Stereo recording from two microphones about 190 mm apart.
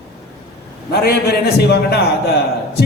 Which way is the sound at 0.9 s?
55° left (ahead or behind).